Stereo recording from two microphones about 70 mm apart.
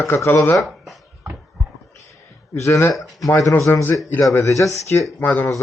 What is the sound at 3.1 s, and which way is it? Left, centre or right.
Speech, left.